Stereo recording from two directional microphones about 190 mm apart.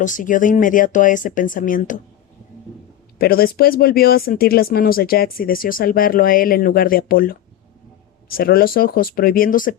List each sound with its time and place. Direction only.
0.0 s speech: 45° left (ahead or behind)
3.2 s speech: 50° left (ahead or behind)